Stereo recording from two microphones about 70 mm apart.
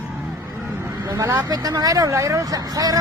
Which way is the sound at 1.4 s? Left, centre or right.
Right.